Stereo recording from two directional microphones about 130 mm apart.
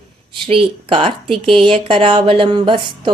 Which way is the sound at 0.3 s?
45° right (ahead or behind).